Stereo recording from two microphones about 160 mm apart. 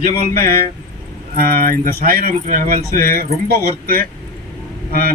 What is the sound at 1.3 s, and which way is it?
Speech, 65° right (ahead or behind).